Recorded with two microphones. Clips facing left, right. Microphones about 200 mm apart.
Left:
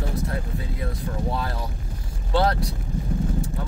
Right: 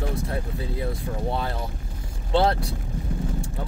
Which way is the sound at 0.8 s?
25° right (ahead or behind).